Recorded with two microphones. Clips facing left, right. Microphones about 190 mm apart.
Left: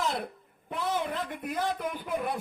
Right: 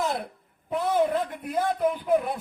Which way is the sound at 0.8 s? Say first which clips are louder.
Right 7 dB; 55° right (ahead or behind).